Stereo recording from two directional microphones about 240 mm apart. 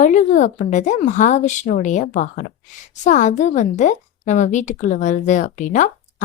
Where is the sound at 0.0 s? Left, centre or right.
Left.